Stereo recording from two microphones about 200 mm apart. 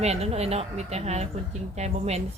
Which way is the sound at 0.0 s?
30° right (ahead or behind).